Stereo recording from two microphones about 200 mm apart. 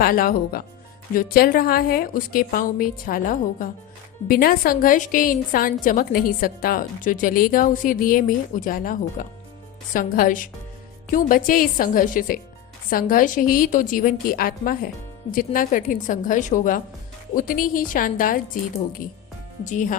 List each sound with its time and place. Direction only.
0.0 s a woman's voice: 45° left (ahead or behind)
19.6 s a woman's voice: 40° left (ahead or behind)